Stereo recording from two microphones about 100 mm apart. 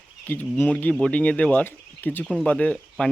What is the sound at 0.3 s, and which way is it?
Speech, 15° left (ahead or behind).